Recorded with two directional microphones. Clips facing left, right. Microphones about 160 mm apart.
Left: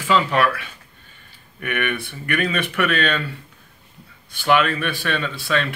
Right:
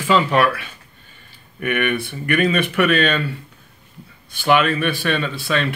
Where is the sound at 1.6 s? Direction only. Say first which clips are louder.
Right 4 dB; 20° right (ahead or behind).